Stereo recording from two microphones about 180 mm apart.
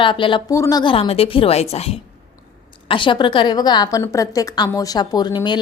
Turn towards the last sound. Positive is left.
turn(degrees=25)  # may be behind; listen again after turning